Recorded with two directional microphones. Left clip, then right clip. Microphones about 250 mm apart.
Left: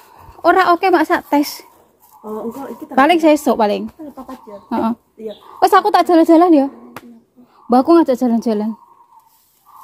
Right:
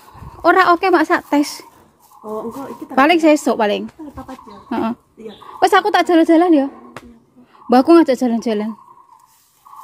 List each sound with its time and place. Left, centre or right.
0.4 s a woman's voice: centre
2.9 s a woman's voice: centre
7.7 s a woman's voice: centre